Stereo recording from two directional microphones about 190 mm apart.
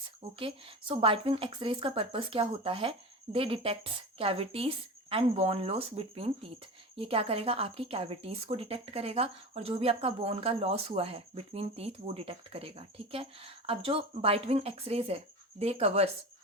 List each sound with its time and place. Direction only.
0.3 s speech: 30° right (ahead or behind)